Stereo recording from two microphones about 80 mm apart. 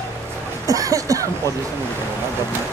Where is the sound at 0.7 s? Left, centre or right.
Right.